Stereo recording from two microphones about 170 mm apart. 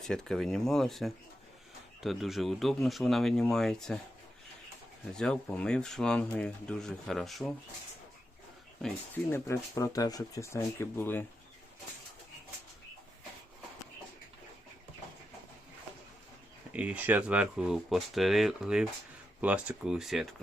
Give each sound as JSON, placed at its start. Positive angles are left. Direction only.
{"t": 0.0, "sound": "speech", "side_deg": 5}
{"t": 5.1, "sound": "speech", "side_deg": 5}
{"t": 9.3, "sound": "speech", "side_deg": 15}
{"t": 16.7, "sound": "speech", "side_deg": -5}